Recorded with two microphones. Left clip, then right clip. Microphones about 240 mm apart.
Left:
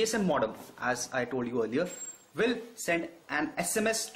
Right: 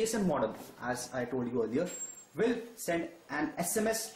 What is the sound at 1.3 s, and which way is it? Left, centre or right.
Speech, left.